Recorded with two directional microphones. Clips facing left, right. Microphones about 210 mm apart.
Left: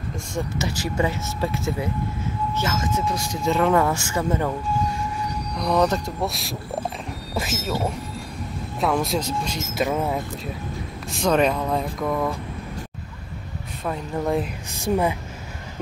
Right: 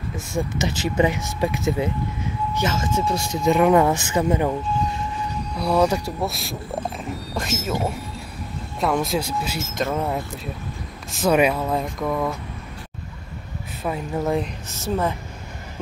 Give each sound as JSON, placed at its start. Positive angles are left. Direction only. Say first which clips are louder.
{"t": 0.6, "sound": "speech", "louder": "right 4 dB", "side_deg": -20}
{"t": 5.6, "sound": "speech", "louder": "right 1 dB", "side_deg": -10}
{"t": 8.7, "sound": "speech", "louder": "right 1 dB", "side_deg": 0}
{"t": 9.8, "sound": "speech", "louder": "left 1 dB", "side_deg": 5}
{"t": 13.8, "sound": "speech", "louder": "right 1 dB", "side_deg": -5}
{"t": 14.7, "sound": "a woman's voice", "louder": "left 3 dB", "side_deg": 15}